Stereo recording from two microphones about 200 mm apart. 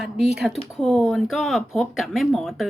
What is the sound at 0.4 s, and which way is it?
Speech, centre (ahead or behind).